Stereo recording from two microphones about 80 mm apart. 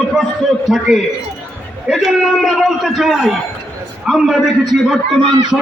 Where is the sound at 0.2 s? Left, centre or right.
Centre.